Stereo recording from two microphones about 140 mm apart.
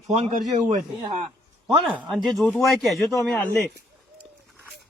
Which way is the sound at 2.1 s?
Centre (ahead or behind).